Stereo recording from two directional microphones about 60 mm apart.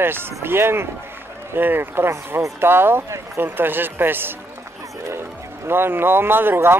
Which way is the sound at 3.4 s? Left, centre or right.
Right.